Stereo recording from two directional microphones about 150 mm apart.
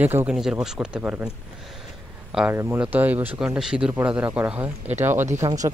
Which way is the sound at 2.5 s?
15° right (ahead or behind).